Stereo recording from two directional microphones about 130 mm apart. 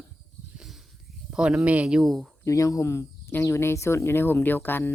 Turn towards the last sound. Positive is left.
turn(degrees=15)  # may be behind; listen again after turning